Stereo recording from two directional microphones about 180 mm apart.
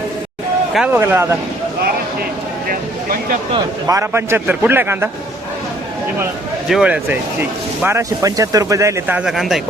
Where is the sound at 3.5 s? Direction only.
15° right (ahead or behind).